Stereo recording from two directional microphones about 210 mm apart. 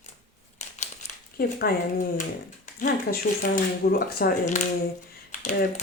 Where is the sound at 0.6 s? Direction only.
35° left (ahead or behind).